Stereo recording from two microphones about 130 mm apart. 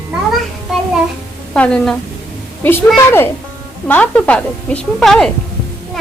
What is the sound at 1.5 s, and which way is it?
Speech, 5° left (ahead or behind).